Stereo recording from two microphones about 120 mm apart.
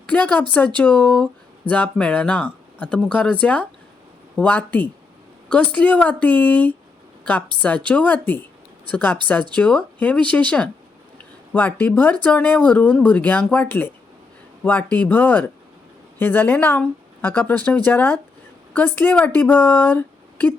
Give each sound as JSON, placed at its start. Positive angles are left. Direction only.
{"t": 0.1, "sound": "speech", "side_deg": 15}